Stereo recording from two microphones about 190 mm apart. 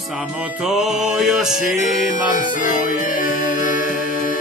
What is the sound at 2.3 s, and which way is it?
Music, 45° left (ahead or behind).